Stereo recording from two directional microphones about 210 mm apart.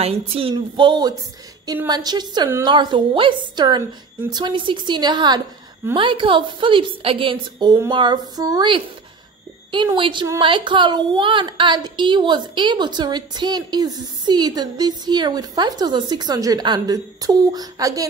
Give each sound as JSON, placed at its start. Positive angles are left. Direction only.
{"t": 0.0, "sound": "a woman's voice", "side_deg": -25}